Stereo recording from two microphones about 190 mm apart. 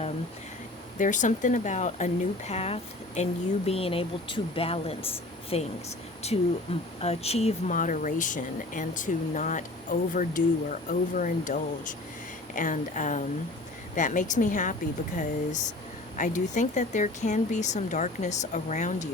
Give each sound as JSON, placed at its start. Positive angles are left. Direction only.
{"t": 0.9, "sound": "speech", "side_deg": 40}